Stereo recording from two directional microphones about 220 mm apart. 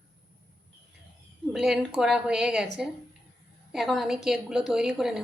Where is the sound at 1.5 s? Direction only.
Centre (ahead or behind).